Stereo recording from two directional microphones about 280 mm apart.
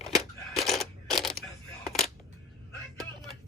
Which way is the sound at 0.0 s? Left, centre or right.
Centre.